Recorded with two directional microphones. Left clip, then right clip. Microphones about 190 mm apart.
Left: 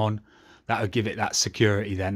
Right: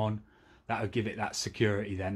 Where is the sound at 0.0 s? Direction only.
40° left (ahead or behind).